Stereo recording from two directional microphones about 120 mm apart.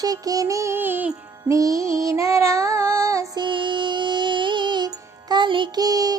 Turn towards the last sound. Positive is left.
turn(degrees=-30)  # may be behind; listen again after turning